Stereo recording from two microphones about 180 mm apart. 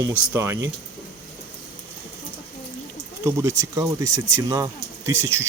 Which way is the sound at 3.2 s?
15° right (ahead or behind).